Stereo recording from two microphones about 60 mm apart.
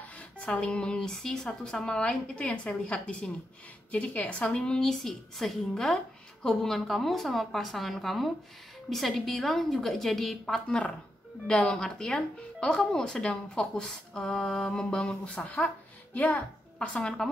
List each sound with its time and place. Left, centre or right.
0.4 s a woman's voice: left
15.5 s a sound: left
16.3 s a woman's voice: centre